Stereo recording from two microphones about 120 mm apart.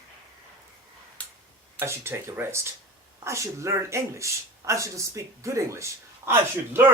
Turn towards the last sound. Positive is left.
turn(degrees=-20)  # may be behind; listen again after turning